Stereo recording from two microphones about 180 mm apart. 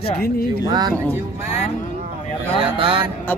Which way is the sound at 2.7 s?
30° right (ahead or behind).